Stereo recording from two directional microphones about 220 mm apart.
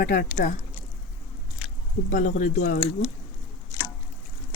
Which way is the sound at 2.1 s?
35° left (ahead or behind).